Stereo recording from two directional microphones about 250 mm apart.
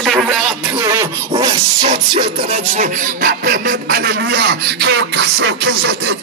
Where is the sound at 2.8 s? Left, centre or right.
Right.